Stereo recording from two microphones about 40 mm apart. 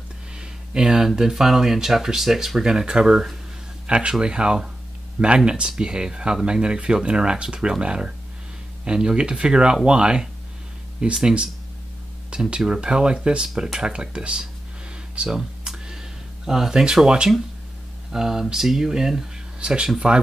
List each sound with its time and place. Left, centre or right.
0.4 s speech: centre
3.8 s speech: right
15.2 s computer keyboard: centre
18.1 s speech: centre